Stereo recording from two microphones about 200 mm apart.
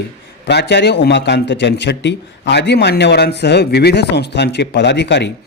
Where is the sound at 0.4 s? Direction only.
60° left (ahead or behind).